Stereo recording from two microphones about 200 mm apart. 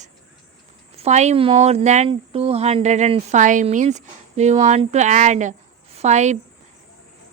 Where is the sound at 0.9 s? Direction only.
35° right (ahead or behind).